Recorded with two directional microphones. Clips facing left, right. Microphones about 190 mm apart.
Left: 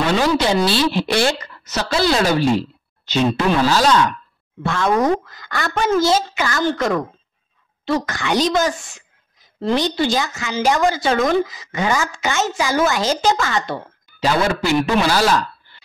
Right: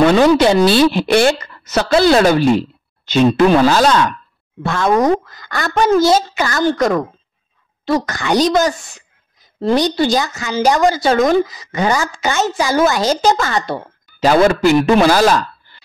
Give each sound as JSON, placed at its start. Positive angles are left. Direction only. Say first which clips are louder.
{"t": 0.0, "sound": "a woman's voice", "louder": "right 7 dB", "side_deg": -55}
{"t": 3.6, "sound": "a woman's voice", "louder": "right 3 dB", "side_deg": -50}
{"t": 14.2, "sound": "speech", "louder": "right 7 dB", "side_deg": -50}